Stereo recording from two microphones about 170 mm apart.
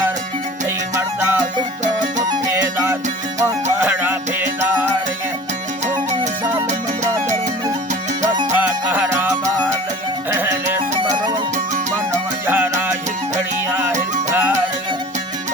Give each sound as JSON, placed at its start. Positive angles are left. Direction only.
{"t": 0.9, "sound": "music", "side_deg": -15}
{"t": 1.8, "sound": "music", "side_deg": -45}
{"t": 2.3, "sound": "music", "side_deg": -15}
{"t": 6.7, "sound": "music", "side_deg": -45}
{"t": 8.5, "sound": "music", "side_deg": -10}
{"t": 11.1, "sound": "music", "side_deg": -25}
{"t": 12.5, "sound": "music", "side_deg": -10}
{"t": 14.3, "sound": "music", "side_deg": -10}